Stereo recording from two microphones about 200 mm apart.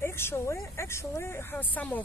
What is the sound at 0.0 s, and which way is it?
A woman's voice, 15° left (ahead or behind).